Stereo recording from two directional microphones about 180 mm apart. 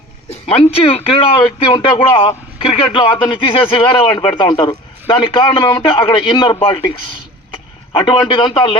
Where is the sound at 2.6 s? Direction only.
30° left (ahead or behind).